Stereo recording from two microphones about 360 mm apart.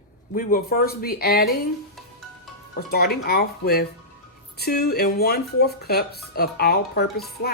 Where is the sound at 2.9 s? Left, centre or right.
Left.